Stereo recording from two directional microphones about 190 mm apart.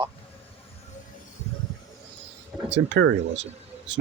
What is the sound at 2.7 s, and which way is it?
Speech, 70° right (ahead or behind).